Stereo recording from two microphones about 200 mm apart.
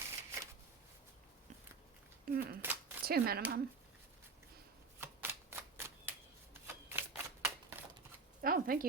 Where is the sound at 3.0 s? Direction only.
50° right (ahead or behind).